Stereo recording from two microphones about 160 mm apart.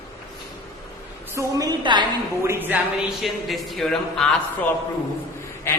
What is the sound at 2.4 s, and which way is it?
Speech, 15° right (ahead or behind).